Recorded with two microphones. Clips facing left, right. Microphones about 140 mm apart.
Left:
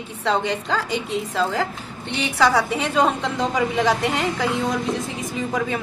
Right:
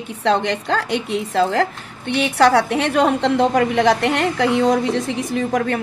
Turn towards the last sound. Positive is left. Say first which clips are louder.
# right 5 dB
turn(degrees=-70)  # may be behind; listen again after turning